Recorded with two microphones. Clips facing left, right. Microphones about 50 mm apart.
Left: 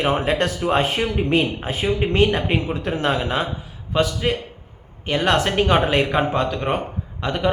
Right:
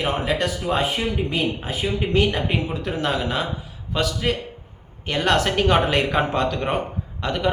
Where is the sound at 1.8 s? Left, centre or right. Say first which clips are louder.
Left 3 dB; left.